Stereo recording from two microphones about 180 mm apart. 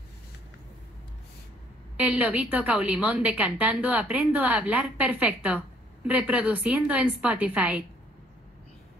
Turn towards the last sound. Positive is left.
turn(degrees=-10)  # may be behind; listen again after turning